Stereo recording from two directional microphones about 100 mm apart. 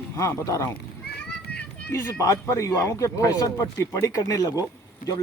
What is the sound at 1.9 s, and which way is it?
Speech, 30° left (ahead or behind).